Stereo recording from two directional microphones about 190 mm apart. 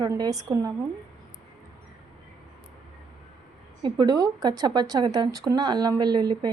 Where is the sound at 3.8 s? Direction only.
25° right (ahead or behind).